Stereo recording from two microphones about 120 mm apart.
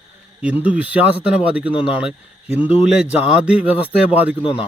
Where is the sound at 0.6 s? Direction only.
10° right (ahead or behind).